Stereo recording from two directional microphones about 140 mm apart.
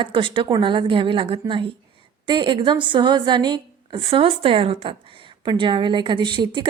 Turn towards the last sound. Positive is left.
turn(degrees=-35)  # may be behind; listen again after turning